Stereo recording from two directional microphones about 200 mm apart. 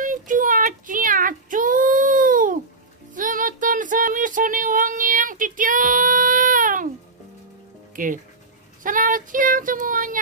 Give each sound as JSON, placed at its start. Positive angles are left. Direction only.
{"t": 0.0, "sound": "child singing", "side_deg": -40}
{"t": 7.9, "sound": "speech", "side_deg": -40}
{"t": 8.8, "sound": "child singing", "side_deg": -40}